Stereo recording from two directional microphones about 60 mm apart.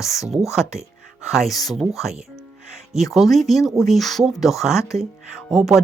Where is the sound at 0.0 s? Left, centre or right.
Centre.